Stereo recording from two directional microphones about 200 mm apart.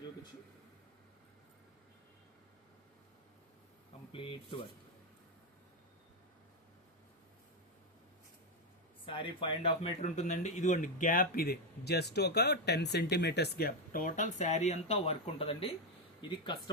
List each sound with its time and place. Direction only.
4.1 s speech: 25° left (ahead or behind)
9.0 s speech: 25° left (ahead or behind)